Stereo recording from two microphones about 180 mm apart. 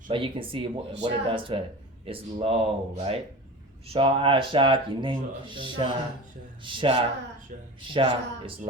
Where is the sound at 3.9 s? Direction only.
30° right (ahead or behind).